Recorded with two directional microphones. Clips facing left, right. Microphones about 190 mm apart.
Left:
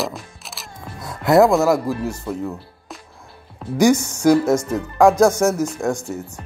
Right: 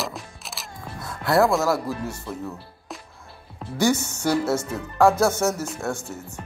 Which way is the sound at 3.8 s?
15° left (ahead or behind).